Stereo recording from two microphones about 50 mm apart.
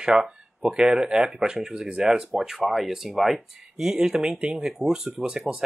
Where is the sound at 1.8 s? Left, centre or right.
Right.